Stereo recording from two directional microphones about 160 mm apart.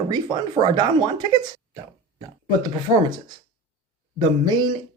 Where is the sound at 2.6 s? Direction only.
25° right (ahead or behind).